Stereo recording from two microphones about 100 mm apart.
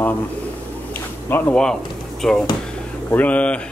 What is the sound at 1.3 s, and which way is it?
Speech, 20° left (ahead or behind).